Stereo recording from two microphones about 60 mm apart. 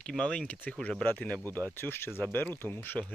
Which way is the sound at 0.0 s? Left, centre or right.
Centre.